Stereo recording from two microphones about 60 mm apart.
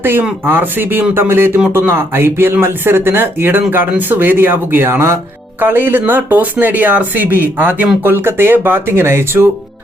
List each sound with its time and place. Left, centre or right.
0.4 s speech: right